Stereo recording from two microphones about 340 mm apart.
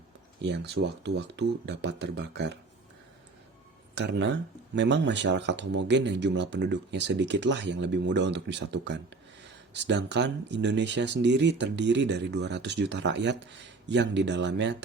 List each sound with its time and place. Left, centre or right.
0.4 s speech: right
3.9 s speech: right